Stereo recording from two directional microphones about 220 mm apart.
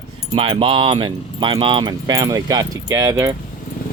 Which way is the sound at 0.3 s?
25° right (ahead or behind).